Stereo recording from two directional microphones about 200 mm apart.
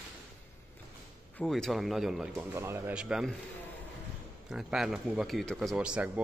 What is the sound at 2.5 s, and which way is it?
Speech, 15° right (ahead or behind).